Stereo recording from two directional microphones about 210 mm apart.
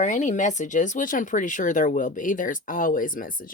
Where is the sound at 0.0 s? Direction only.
35° left (ahead or behind).